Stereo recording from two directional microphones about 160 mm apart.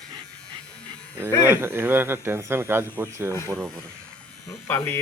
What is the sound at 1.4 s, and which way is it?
Speech, 15° right (ahead or behind).